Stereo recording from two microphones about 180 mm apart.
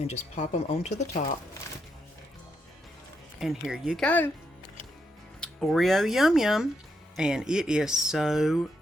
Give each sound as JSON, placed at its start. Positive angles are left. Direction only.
{"t": 0.0, "sound": "speech", "side_deg": 40}
{"t": 3.4, "sound": "speech", "side_deg": 0}
{"t": 5.4, "sound": "speech", "side_deg": 5}